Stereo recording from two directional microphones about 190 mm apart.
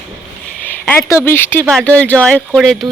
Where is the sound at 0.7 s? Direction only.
10° left (ahead or behind).